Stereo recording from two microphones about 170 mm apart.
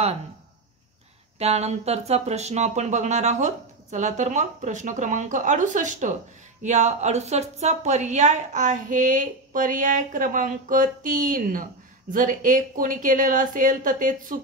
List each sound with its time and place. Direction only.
1.4 s a woman's voice: 40° right (ahead or behind)